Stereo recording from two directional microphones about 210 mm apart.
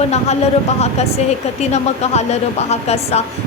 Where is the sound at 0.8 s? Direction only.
30° left (ahead or behind).